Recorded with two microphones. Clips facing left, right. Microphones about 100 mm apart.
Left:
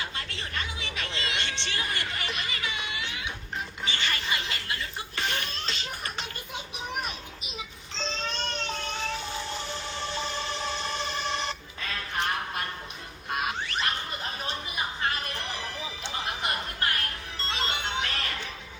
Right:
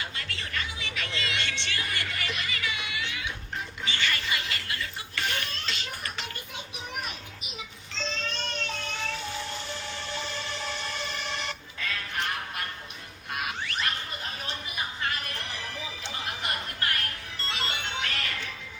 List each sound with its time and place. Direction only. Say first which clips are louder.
0.0 s music: left 1 dB; 30° left (ahead or behind)
3.8 s a sound: right 1 dB; 30° left (ahead or behind)
7.9 s baby cry: left 1 dB; 30° left (ahead or behind)
9.6 s emergency vehicle: left 2 dB; 25° left (ahead or behind)
13.3 s music: left 3 dB; 30° left (ahead or behind)